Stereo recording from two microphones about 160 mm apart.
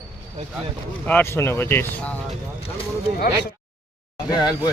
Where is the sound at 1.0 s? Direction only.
15° left (ahead or behind).